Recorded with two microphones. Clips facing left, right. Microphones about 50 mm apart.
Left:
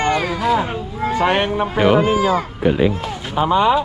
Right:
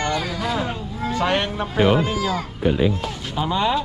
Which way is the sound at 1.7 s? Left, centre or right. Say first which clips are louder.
Left 3 dB; left.